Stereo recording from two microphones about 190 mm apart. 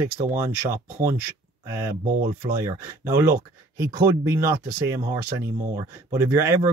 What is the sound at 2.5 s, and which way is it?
Speech, 15° right (ahead or behind).